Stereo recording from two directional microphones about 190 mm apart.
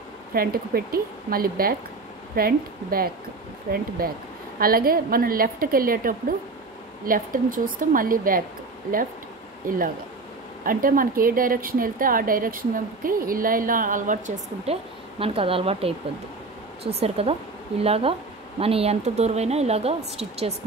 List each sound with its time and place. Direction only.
0.3 s speech: 50° right (ahead or behind)
4.6 s speech: 50° right (ahead or behind)
10.6 s speech: 50° right (ahead or behind)